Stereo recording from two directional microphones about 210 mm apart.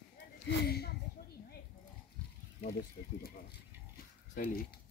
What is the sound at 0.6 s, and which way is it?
Speech, 50° left (ahead or behind).